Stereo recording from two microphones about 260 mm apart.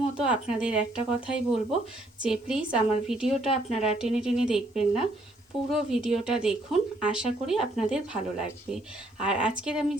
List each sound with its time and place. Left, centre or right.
0.2 s speech: centre
3.4 s speech: left
3.8 s speech: centre